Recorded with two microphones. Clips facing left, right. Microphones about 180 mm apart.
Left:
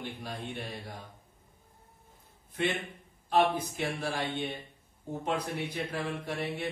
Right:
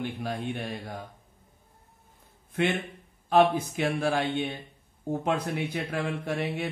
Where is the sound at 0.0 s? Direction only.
60° right (ahead or behind).